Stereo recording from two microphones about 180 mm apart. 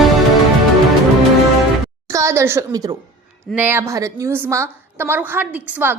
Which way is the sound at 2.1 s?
15° right (ahead or behind).